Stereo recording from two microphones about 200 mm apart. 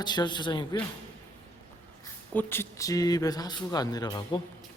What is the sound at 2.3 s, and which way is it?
Speech, 10° left (ahead or behind).